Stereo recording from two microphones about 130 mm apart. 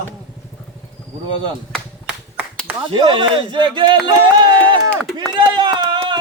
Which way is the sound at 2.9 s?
40° right (ahead or behind).